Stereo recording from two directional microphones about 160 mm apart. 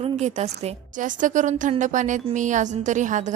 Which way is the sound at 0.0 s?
45° right (ahead or behind).